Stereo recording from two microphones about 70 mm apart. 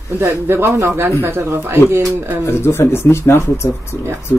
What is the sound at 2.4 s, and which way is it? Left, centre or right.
Speech, left.